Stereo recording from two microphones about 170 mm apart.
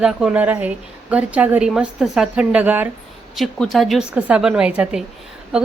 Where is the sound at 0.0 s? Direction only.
5° right (ahead or behind).